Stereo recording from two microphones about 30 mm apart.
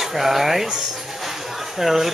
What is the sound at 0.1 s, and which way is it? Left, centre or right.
Speech, centre.